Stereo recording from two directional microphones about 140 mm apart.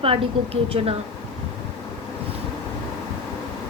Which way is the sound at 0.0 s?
45° right (ahead or behind).